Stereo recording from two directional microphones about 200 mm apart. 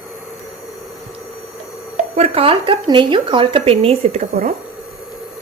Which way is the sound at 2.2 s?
30° right (ahead or behind).